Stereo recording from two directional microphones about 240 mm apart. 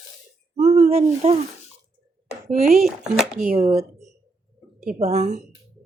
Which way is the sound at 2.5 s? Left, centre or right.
Right.